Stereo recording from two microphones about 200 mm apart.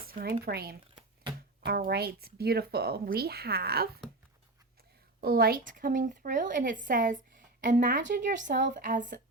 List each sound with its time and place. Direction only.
0.0 s speech: 45° right (ahead or behind)
1.9 s speech: 50° right (ahead or behind)
5.2 s speech: 50° right (ahead or behind)